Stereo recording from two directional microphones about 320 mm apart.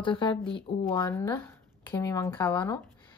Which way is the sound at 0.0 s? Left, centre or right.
Centre.